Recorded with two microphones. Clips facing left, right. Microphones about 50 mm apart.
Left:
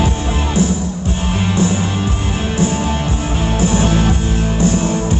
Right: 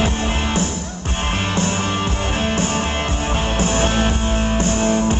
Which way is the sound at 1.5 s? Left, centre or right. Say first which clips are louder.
Left 6 dB; right.